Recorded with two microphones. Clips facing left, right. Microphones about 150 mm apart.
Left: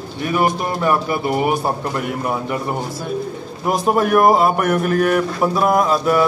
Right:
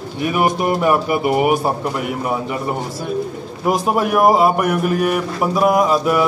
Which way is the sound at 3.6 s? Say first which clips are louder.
Even; 5° right (ahead or behind).